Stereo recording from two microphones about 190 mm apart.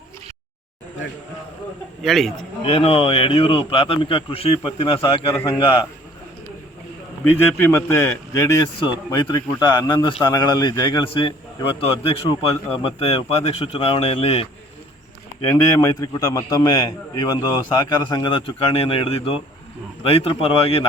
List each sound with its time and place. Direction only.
2.0 s a man's voice: centre (ahead or behind)
2.6 s a man's voice: 30° left (ahead or behind)
7.3 s a man's voice: 10° left (ahead or behind); by 14.4 s 30° left (ahead or behind)
15.4 s a man's voice: 15° left (ahead or behind); by 20.8 s 30° left (ahead or behind)